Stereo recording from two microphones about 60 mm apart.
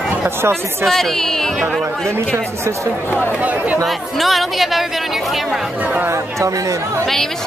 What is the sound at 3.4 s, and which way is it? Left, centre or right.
Speech, right.